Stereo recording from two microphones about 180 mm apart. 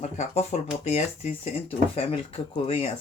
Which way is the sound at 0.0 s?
40° left (ahead or behind).